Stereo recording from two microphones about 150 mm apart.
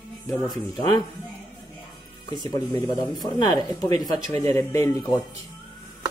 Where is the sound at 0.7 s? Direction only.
30° left (ahead or behind).